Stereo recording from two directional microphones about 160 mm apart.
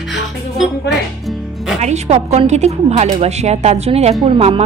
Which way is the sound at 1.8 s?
45° right (ahead or behind).